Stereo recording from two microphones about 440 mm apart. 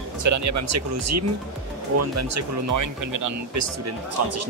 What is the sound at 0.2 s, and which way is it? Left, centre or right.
Speech, right.